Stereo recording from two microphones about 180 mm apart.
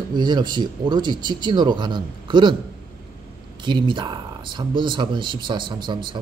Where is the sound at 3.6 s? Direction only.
25° right (ahead or behind).